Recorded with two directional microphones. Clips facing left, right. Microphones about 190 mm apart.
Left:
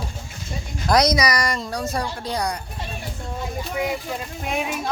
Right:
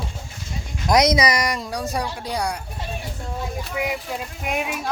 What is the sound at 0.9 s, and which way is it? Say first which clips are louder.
Speech: right 1 dB; 25° right (ahead or behind).